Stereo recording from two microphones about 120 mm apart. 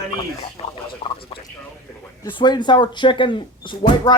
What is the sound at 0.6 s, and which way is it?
Speech, 45° left (ahead or behind).